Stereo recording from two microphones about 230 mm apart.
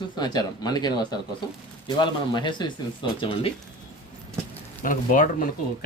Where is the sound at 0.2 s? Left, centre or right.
Centre.